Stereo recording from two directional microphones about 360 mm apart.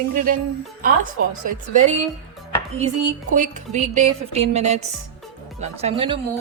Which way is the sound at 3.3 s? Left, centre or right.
Right.